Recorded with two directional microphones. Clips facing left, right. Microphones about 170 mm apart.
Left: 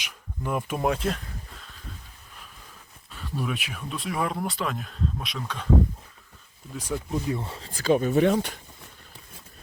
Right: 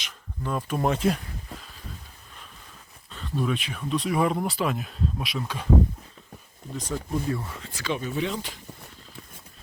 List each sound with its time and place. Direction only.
0.0 s speech: 10° left (ahead or behind)
0.8 s a sound: centre (ahead or behind)
3.1 s speech: 5° left (ahead or behind)
6.7 s speech: 10° left (ahead or behind)
7.3 s speech: 30° left (ahead or behind)
8.1 s speech: 55° left (ahead or behind)